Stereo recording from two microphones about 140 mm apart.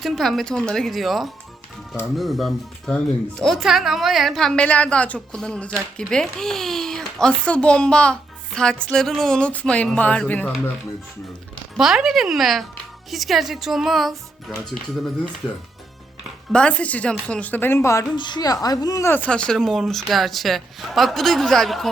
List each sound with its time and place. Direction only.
0.0 s a woman's voice: centre (ahead or behind)
11.8 s a woman's voice: 5° right (ahead or behind)
16.5 s a woman's voice: 10° left (ahead or behind)
18.2 s a woman's voice: 30° left (ahead or behind); by 21.8 s centre (ahead or behind)